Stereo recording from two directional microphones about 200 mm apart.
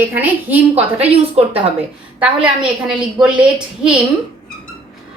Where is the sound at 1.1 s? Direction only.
30° right (ahead or behind).